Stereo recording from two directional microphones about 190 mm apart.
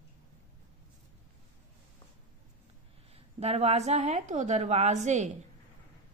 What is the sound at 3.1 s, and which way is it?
Speech, 35° right (ahead or behind).